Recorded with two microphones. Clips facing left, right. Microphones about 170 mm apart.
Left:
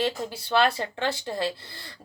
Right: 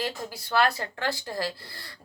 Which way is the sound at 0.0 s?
25° left (ahead or behind).